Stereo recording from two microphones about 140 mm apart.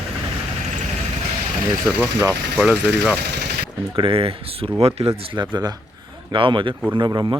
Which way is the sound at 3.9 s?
40° right (ahead or behind).